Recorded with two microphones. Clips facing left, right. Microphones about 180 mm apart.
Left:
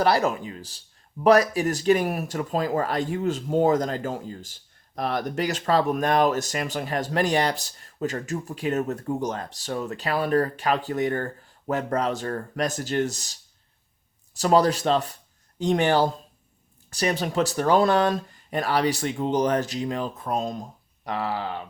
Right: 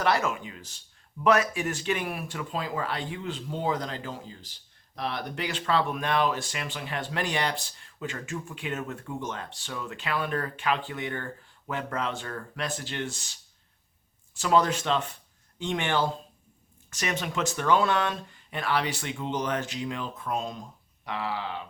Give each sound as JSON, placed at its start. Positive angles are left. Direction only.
{"t": 0.0, "sound": "speech", "side_deg": 35}